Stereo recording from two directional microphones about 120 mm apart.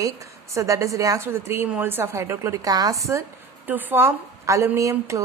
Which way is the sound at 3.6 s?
15° right (ahead or behind).